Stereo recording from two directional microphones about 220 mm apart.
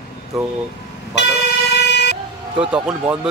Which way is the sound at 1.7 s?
50° left (ahead or behind).